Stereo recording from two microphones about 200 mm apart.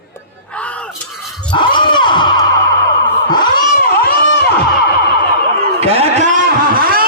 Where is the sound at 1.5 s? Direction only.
25° left (ahead or behind).